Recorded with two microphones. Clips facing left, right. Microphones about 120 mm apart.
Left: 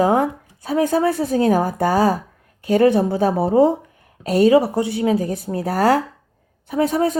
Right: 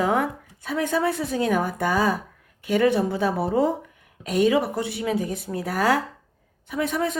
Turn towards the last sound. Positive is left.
turn(degrees=40)  # may be behind; listen again after turning